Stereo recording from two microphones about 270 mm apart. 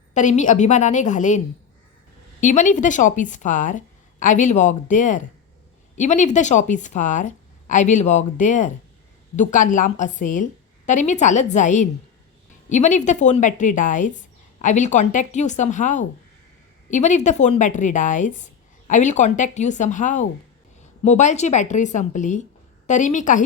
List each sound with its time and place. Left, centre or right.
0.1 s a woman's voice: left
2.4 s a woman's voice: left